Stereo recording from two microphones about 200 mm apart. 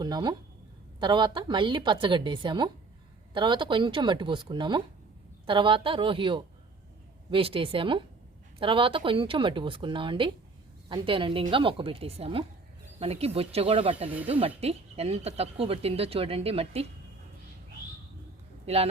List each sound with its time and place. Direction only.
0.0 s speech: 20° right (ahead or behind)
18.6 s speech: 30° right (ahead or behind)